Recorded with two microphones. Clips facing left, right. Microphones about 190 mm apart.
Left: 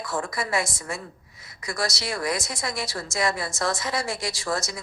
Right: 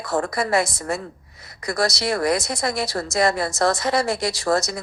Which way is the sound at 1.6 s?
40° right (ahead or behind).